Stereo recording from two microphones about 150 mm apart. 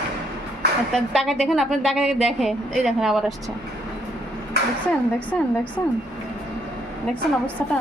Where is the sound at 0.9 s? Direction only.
Centre (ahead or behind).